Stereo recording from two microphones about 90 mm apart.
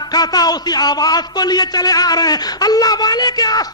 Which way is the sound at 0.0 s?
45° left (ahead or behind).